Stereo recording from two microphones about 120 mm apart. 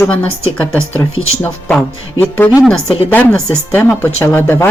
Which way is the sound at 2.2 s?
15° left (ahead or behind).